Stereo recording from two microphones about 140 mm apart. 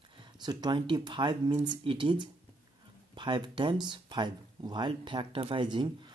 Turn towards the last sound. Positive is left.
turn(degrees=-35)  # may be behind; listen again after turning